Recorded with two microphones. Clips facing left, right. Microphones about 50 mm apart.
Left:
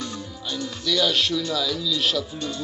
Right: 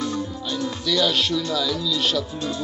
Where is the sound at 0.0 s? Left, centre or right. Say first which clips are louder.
Right 6 dB; centre.